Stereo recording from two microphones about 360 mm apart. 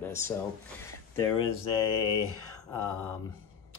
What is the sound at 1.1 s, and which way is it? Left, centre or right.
Speech, centre.